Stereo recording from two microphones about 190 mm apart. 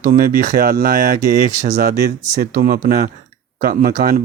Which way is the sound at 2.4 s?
50° right (ahead or behind).